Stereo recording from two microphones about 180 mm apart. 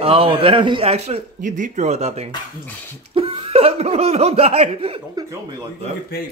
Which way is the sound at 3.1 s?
30° right (ahead or behind).